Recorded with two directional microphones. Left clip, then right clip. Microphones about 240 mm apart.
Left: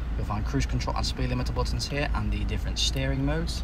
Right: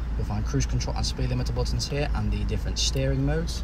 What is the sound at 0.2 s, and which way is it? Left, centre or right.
Speech, centre.